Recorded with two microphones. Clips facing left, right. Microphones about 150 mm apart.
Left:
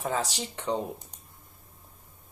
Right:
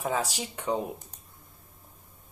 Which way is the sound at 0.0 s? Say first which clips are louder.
Right 1 dB; 10° right (ahead or behind).